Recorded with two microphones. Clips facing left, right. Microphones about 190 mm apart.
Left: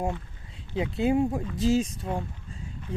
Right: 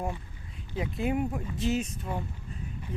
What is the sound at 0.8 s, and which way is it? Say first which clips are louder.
Speech: left 5 dB; 25° left (ahead or behind).